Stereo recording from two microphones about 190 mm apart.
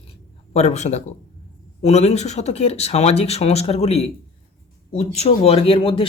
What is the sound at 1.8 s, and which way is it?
Speech, 35° left (ahead or behind).